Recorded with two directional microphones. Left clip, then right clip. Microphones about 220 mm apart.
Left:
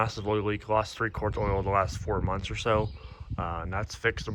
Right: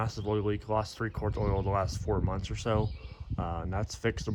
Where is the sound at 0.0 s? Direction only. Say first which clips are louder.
Left 4 dB; 15° right (ahead or behind).